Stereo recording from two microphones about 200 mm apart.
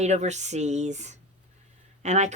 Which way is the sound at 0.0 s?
35° right (ahead or behind).